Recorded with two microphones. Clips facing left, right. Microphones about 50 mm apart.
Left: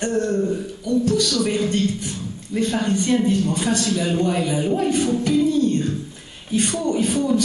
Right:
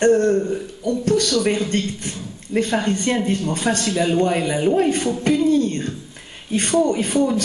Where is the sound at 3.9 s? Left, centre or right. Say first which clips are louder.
Right 2 dB; right.